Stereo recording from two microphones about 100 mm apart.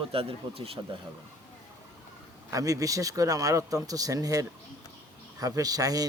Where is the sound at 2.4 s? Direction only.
35° right (ahead or behind).